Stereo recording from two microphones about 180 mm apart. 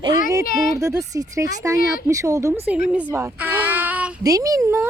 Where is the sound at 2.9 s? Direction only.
10° right (ahead or behind).